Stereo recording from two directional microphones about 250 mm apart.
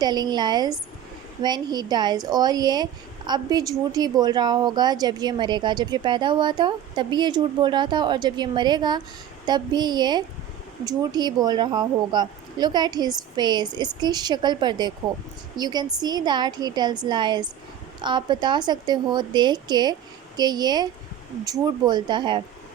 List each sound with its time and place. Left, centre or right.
0.0 s speech: centre